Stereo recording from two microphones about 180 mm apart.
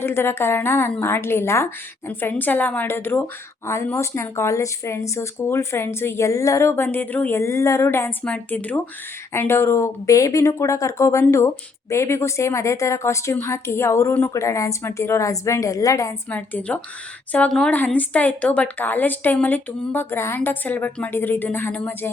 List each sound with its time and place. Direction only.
0.0 s speech: 15° left (ahead or behind)